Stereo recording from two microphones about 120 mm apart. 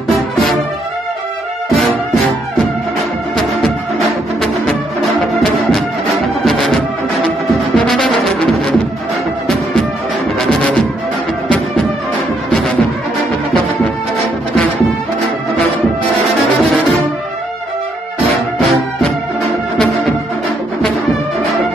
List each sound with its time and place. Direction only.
5.2 s music: 5° left (ahead or behind)
11.4 s music: 5° left (ahead or behind)